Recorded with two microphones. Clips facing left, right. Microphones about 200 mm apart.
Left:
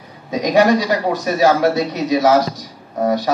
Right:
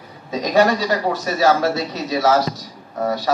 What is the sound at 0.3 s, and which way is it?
A man's voice, 15° left (ahead or behind).